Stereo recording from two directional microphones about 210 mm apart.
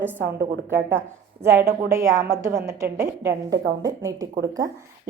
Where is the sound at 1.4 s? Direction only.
10° right (ahead or behind).